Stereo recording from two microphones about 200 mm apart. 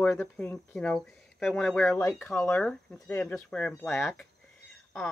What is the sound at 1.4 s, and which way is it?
Speech, centre (ahead or behind).